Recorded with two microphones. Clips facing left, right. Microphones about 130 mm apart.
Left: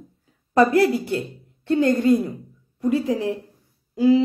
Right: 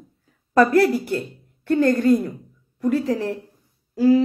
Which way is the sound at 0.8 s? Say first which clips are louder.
Right 1 dB; 20° left (ahead or behind).